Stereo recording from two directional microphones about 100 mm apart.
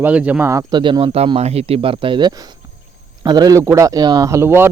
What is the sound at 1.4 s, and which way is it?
Speech, 90° right.